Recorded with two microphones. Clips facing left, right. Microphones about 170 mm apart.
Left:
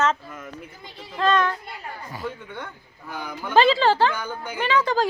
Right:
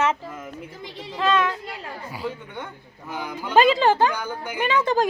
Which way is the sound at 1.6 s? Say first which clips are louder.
Right 4 dB; 90° right.